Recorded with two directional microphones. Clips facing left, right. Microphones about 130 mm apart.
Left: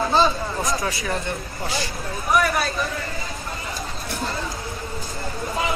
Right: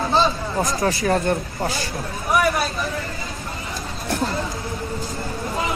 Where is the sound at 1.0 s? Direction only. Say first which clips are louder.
Right 7 dB; 45° right (ahead or behind).